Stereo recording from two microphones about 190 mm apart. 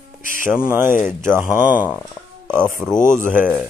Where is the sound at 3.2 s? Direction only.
45° left (ahead or behind).